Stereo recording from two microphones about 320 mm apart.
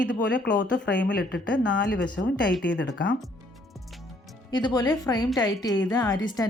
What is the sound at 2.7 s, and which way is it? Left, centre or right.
Speech, left.